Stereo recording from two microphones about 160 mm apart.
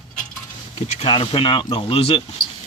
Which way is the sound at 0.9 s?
40° left (ahead or behind).